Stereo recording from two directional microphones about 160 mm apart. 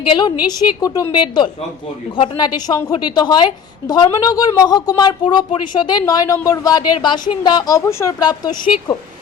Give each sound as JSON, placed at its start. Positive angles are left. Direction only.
{"t": 0.0, "sound": "a woman's voice", "side_deg": 30}